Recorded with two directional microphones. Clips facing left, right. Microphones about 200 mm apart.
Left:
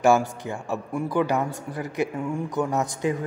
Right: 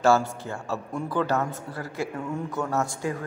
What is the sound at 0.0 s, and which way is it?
A man's voice, 15° left (ahead or behind).